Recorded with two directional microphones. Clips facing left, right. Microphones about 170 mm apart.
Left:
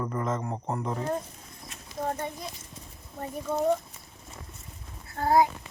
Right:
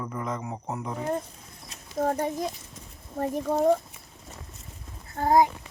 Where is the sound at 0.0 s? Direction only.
Centre (ahead or behind).